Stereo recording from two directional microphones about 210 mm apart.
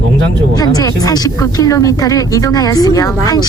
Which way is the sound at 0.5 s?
15° left (ahead or behind).